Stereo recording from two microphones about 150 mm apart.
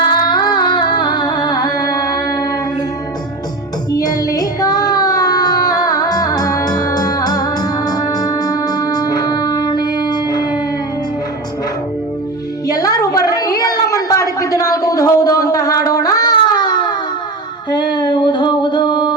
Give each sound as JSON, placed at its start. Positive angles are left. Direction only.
{"t": 0.0, "sound": "music", "side_deg": 30}
{"t": 3.9, "sound": "child singing", "side_deg": 25}
{"t": 12.6, "sound": "a sound", "side_deg": 25}